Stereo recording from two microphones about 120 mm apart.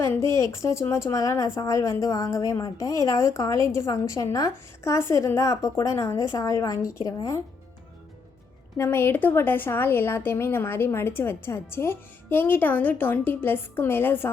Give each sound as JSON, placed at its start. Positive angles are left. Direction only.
{"t": 0.3, "sound": "speech", "side_deg": 25}
{"t": 8.8, "sound": "speech", "side_deg": 20}